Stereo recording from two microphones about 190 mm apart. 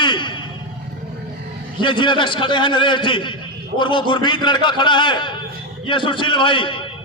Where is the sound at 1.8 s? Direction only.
25° left (ahead or behind).